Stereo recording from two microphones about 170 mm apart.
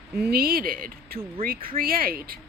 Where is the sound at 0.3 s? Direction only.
60° right (ahead or behind).